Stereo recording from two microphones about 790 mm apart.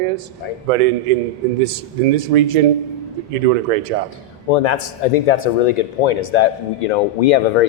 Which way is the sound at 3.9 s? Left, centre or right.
Right.